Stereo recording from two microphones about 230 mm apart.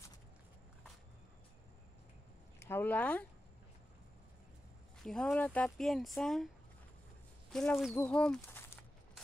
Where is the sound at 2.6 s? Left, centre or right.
Centre.